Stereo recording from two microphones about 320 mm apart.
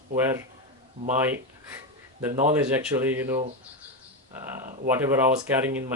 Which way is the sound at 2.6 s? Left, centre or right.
Centre.